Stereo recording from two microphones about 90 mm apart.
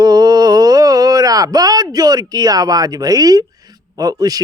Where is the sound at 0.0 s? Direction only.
45° right (ahead or behind).